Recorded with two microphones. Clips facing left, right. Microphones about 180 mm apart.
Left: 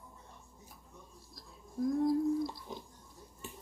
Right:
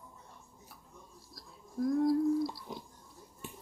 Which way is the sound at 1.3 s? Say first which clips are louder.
Right 2 dB; 20° left (ahead or behind).